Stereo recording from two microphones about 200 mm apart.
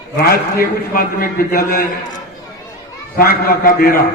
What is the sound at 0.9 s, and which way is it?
Speech, 45° left (ahead or behind).